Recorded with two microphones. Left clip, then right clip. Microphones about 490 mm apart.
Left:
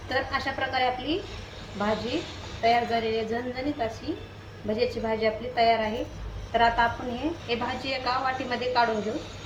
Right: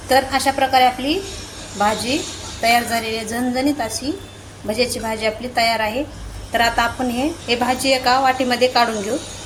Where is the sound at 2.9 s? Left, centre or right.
Centre.